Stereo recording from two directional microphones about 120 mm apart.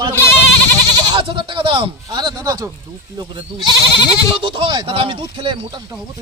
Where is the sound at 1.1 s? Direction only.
45° right (ahead or behind).